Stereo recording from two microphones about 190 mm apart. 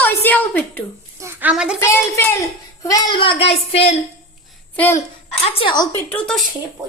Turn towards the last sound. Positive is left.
turn(degrees=0)  # may be behind; listen again after turning